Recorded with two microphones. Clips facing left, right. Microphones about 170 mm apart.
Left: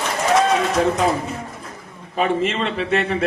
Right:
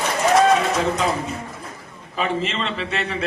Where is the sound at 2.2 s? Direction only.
50° left (ahead or behind).